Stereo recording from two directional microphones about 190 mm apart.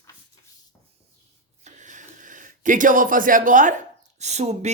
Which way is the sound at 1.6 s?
40° right (ahead or behind).